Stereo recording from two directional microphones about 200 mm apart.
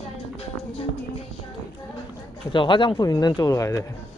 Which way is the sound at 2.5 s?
25° left (ahead or behind).